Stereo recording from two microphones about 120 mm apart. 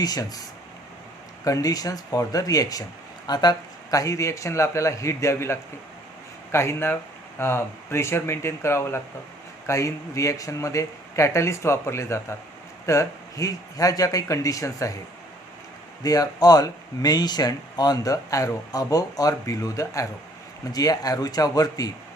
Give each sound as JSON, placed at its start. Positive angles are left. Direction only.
{"t": 0.0, "sound": "speech", "side_deg": 30}
{"t": 1.5, "sound": "speech", "side_deg": 30}
{"t": 16.0, "sound": "speech", "side_deg": 30}